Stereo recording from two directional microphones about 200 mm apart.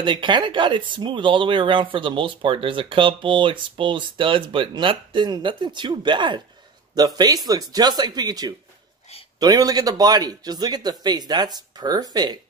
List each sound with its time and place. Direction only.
0.0 s speech: 25° right (ahead or behind)